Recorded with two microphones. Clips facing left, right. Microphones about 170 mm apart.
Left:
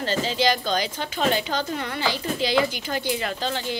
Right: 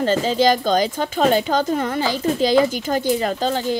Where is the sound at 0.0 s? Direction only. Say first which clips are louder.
Right 6 dB; 45° right (ahead or behind).